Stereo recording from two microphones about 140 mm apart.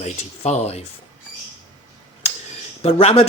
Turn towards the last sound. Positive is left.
turn(degrees=45)  # may be behind; listen again after turning